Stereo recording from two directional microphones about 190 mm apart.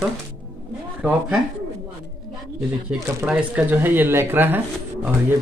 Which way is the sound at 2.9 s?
5° right (ahead or behind).